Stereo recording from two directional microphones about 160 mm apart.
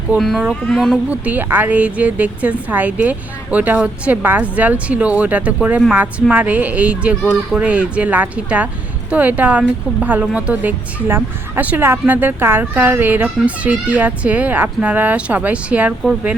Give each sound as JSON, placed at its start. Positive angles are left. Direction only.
{"t": 0.1, "sound": "a child's voice", "side_deg": 0}